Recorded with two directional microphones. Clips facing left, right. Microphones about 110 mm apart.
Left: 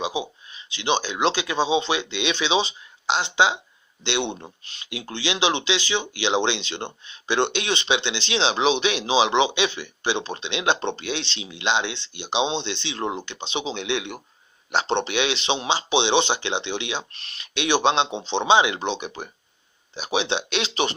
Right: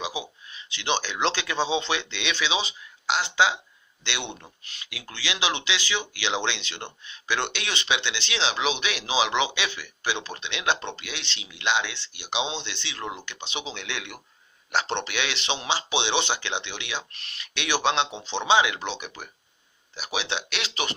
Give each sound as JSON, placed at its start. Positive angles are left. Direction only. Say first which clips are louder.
{"t": 0.0, "sound": "speech", "louder": "left 5 dB", "side_deg": 20}